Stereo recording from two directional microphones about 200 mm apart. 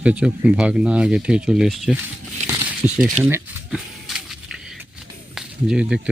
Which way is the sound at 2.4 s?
10° right (ahead or behind).